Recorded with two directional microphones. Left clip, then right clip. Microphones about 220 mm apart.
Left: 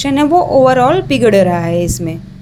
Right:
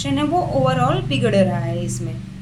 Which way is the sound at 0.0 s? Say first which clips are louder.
Left 9 dB; 35° left (ahead or behind).